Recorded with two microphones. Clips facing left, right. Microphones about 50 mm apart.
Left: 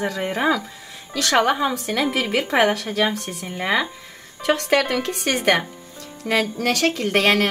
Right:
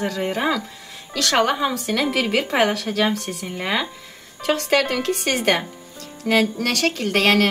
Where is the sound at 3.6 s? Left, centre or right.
Left.